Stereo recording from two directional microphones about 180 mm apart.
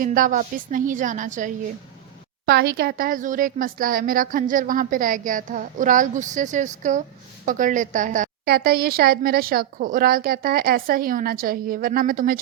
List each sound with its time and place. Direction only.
0.0 s a woman's voice: 50° right (ahead or behind)
2.5 s a woman's voice: 60° right (ahead or behind); by 8.3 s 45° right (ahead or behind)
8.4 s a woman's voice: 60° right (ahead or behind)